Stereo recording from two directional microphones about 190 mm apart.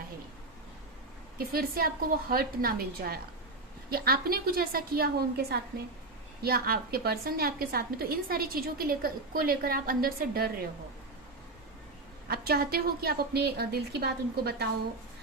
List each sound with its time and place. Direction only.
1.4 s a woman's voice: 50° right (ahead or behind)
12.3 s a woman's voice: 55° right (ahead or behind)